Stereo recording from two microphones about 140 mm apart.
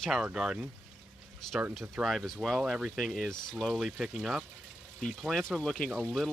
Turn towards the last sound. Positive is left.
turn(degrees=-5)  # may be behind; listen again after turning